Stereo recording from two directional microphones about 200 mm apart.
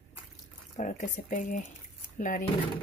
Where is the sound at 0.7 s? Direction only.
35° left (ahead or behind).